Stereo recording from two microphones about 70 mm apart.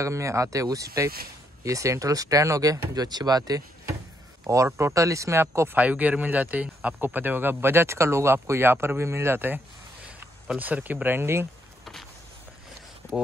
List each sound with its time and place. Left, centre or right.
0.0 s speech: right
2.9 s speech: right
4.6 s speech: right
5.8 s speech: right
10.6 s speech: right